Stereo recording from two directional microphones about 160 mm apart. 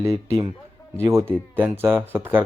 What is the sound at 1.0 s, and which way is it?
Speech, 15° right (ahead or behind).